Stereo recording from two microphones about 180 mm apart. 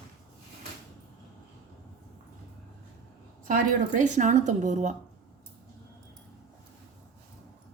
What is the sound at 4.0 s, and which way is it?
Speech, 45° right (ahead or behind).